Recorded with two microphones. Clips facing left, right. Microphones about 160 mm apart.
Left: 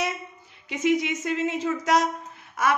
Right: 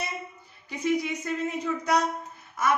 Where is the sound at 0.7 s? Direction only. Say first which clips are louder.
Left 3 dB; 90° left.